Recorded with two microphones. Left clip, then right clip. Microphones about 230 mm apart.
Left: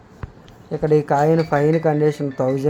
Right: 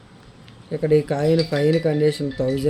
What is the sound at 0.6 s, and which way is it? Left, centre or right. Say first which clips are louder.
Speech: left 2 dB; left.